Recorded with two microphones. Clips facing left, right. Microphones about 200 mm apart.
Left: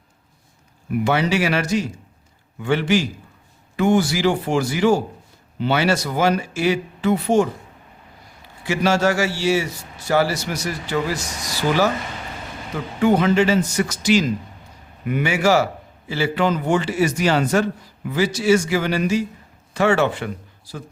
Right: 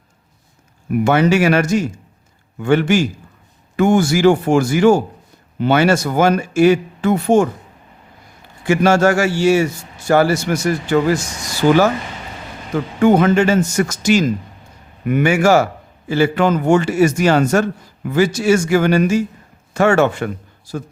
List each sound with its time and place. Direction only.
0.9 s a man's voice: 50° right (ahead or behind)
8.6 s a man's voice: 50° right (ahead or behind)
13.0 s a man's voice: 50° right (ahead or behind)